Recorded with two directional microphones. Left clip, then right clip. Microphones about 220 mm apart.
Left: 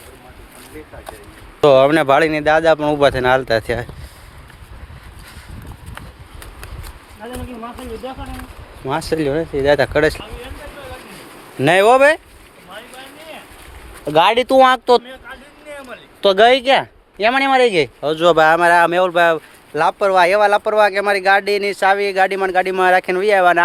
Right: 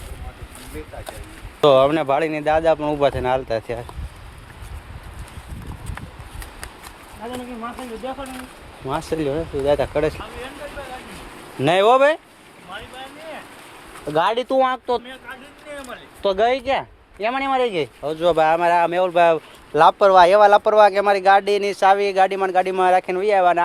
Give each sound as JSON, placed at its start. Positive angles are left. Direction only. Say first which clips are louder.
{"t": 1.6, "sound": "speech", "louder": "left 4 dB", "side_deg": 30}
{"t": 7.2, "sound": "speech", "louder": "even", "side_deg": 5}
{"t": 8.9, "sound": "speech", "louder": "left 4 dB", "side_deg": 25}
{"t": 9.6, "sound": "speech", "louder": "left 5 dB", "side_deg": 35}
{"t": 11.6, "sound": "speech", "louder": "left 4 dB", "side_deg": 25}
{"t": 14.1, "sound": "speech", "louder": "left 6 dB", "side_deg": 40}
{"t": 19.1, "sound": "speech", "louder": "left 1 dB", "side_deg": 10}
{"t": 19.7, "sound": "speech", "louder": "right 2 dB", "side_deg": -5}